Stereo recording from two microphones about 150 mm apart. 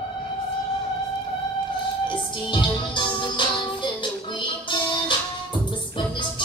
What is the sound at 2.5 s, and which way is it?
Music, 30° left (ahead or behind).